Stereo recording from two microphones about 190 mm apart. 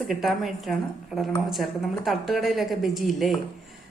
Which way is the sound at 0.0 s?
Centre (ahead or behind).